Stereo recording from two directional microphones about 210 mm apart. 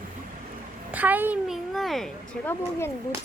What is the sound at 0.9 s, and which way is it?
A woman's voice, 10° right (ahead or behind).